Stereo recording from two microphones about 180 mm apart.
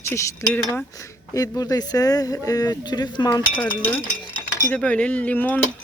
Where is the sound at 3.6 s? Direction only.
10° left (ahead or behind).